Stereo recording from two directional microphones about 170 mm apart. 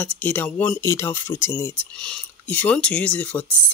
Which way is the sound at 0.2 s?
10° left (ahead or behind).